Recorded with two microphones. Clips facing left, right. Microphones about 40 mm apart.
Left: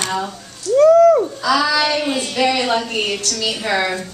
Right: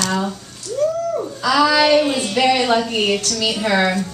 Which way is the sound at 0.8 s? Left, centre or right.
Left.